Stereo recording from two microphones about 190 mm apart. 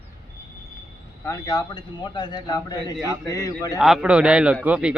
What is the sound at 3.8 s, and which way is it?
A man's voice, centre (ahead or behind).